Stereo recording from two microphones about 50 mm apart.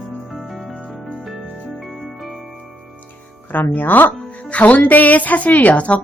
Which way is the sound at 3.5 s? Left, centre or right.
Left.